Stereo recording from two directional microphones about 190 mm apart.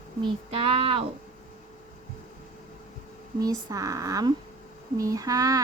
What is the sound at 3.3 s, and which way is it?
A woman's voice, 20° right (ahead or behind).